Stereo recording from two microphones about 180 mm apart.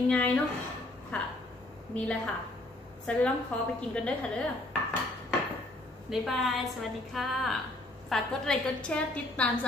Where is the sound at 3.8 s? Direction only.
5° left (ahead or behind).